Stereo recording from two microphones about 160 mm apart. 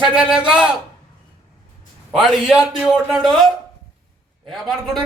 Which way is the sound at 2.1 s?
5° right (ahead or behind).